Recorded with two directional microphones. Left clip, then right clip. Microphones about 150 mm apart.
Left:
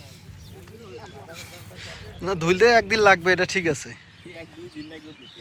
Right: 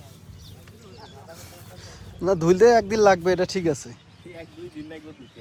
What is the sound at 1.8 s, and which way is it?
Speech, 35° right (ahead or behind).